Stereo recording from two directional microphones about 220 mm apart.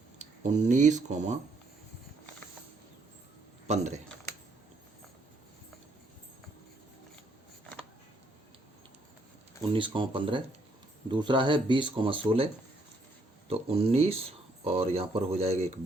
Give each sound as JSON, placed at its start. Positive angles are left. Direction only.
{"t": 0.2, "sound": "speech", "side_deg": -35}
{"t": 3.7, "sound": "speech", "side_deg": -30}
{"t": 9.7, "sound": "speech", "side_deg": -20}
{"t": 13.5, "sound": "speech", "side_deg": -25}